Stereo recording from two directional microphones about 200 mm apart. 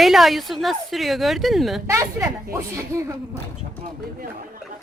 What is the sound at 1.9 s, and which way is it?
Speech, 15° right (ahead or behind).